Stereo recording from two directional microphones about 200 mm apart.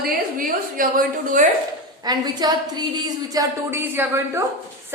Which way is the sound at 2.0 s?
20° right (ahead or behind).